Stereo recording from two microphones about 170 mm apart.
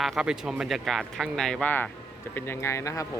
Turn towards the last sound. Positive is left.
turn(degrees=20)  # may be behind; listen again after turning